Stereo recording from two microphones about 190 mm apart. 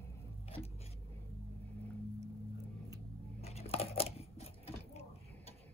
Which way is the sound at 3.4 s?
30° left (ahead or behind).